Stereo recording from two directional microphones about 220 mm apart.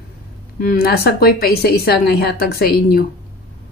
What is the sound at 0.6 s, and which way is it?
Speech, 40° left (ahead or behind).